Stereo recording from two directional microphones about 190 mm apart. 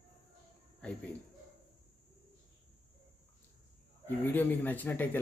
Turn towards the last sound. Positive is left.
turn(degrees=10)  # may be behind; listen again after turning